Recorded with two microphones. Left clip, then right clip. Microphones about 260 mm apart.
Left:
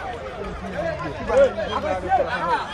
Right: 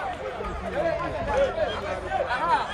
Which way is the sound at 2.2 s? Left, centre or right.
Right.